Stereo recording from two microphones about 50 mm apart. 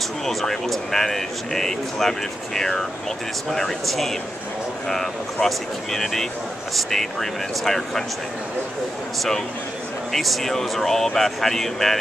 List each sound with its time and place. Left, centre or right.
0.2 s a man's voice: centre
10.1 s speech: centre